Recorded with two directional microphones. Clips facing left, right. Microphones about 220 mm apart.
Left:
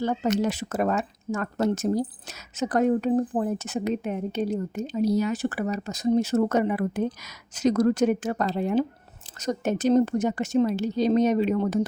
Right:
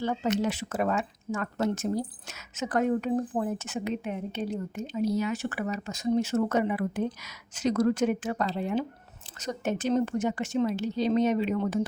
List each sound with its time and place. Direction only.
0.0 s a woman's voice: 40° left (ahead or behind)